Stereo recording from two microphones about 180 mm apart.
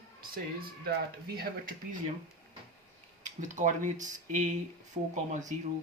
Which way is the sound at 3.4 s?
45° right (ahead or behind).